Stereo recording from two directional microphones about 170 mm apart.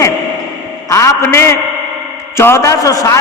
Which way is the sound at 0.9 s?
15° left (ahead or behind).